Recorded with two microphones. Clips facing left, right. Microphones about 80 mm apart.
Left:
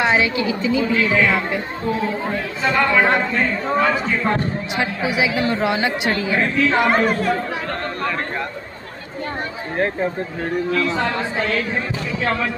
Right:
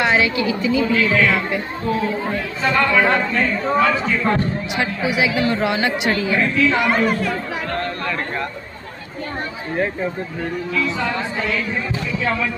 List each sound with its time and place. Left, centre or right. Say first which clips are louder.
0.0 s a man's voice: even; left
2.6 s a man's voice: even; centre
5.3 s speech: right 1 dB; left
5.6 s a man's voice: even; left
6.4 s speech: left 1 dB; left
10.7 s speech: even; left